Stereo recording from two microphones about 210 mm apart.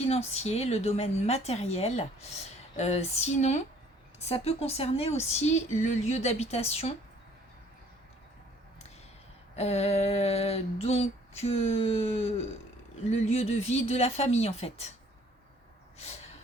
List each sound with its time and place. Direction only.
0.0 s a woman's voice: 30° left (ahead or behind)
9.6 s a sound: 30° left (ahead or behind)
13.1 s a woman's voice: 30° left (ahead or behind)